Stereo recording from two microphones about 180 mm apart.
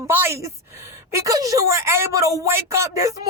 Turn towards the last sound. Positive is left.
turn(degrees=-20)  # may be behind; listen again after turning